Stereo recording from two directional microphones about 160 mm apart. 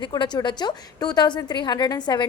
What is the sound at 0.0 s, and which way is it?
A woman's voice, 25° left (ahead or behind).